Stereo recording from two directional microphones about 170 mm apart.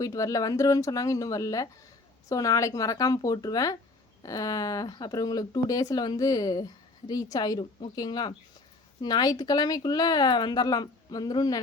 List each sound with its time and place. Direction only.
0.0 s speech: 20° left (ahead or behind)